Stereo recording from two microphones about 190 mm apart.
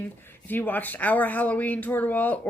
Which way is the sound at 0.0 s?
10° left (ahead or behind).